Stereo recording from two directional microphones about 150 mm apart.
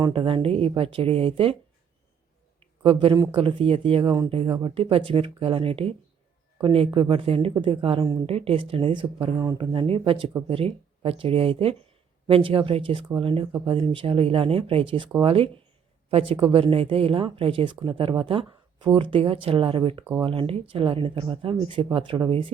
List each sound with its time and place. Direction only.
0.1 s speech: 35° right (ahead or behind)
2.8 s speech: 35° right (ahead or behind)
9.7 s speech: 40° right (ahead or behind)